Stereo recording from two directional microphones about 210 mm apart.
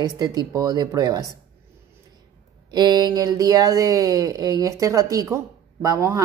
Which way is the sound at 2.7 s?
20° right (ahead or behind).